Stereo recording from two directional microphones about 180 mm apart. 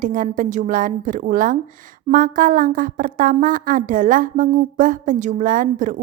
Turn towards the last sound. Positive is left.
turn(degrees=-45)  # may be behind; listen again after turning